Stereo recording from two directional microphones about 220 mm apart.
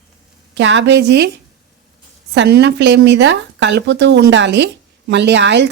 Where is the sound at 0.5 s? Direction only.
55° right (ahead or behind).